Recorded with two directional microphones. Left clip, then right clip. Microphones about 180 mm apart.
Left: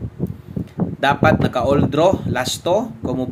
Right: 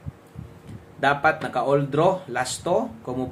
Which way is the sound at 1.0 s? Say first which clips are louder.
Left 4 dB; 30° left (ahead or behind).